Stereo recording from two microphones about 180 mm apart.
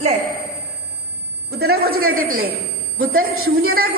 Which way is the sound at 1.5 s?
60° right (ahead or behind).